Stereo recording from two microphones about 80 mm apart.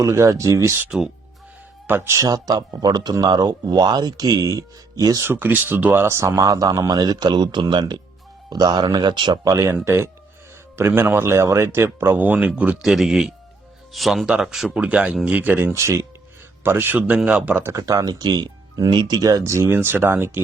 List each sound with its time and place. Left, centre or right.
0.0 s speech: right
0.9 s speech: centre
1.9 s speech: right
2.2 s speech: right
5.2 s speech: right
6.4 s speech: right
9.4 s speech: right; by 12.8 s centre
12.8 s speech: centre
15.6 s speech: right; by 17.6 s centre
17.6 s speech: right
17.8 s speech: right
19.5 s speech: right